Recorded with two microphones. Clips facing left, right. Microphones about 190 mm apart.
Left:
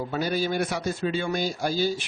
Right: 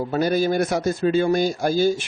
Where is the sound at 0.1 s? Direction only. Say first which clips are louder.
Right 7 dB; 45° right (ahead or behind).